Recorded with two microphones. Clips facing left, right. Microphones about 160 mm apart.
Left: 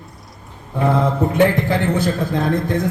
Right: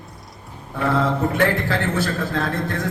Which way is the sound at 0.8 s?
20° left (ahead or behind).